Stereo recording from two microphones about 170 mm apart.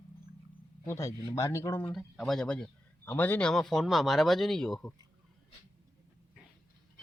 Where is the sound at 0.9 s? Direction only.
20° left (ahead or behind).